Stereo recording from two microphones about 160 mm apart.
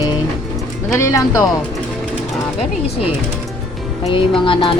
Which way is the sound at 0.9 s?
20° left (ahead or behind).